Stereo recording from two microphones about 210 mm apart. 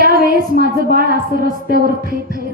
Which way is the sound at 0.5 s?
45° right (ahead or behind).